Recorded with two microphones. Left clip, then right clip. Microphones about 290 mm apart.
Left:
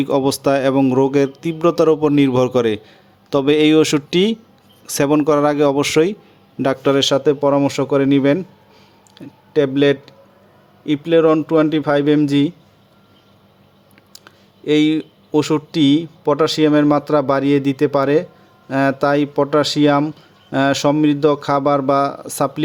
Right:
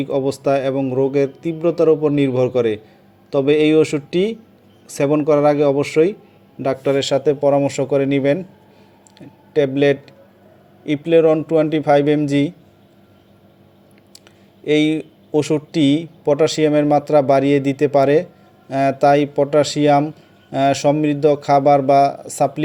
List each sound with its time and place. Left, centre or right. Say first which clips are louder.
0.0 s speech: left 2 dB; centre
14.1 s speech: left 4 dB; centre